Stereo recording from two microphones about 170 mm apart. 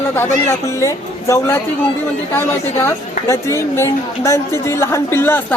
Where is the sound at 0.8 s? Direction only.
15° left (ahead or behind).